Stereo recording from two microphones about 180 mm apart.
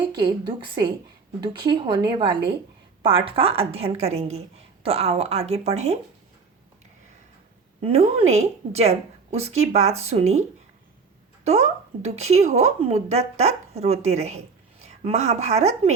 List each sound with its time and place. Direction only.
0.0 s a woman's voice: 25° right (ahead or behind)
7.8 s speech: 30° right (ahead or behind)
11.4 s speech: 35° right (ahead or behind)